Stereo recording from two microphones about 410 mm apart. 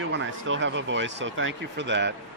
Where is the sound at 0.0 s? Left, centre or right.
Right.